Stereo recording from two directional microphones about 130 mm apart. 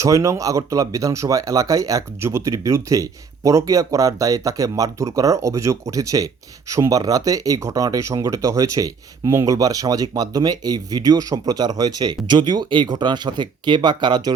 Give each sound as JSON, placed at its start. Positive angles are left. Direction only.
{"t": 0.0, "sound": "speech", "side_deg": -25}